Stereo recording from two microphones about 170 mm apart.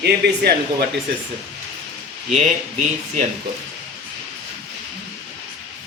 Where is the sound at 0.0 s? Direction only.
70° right (ahead or behind).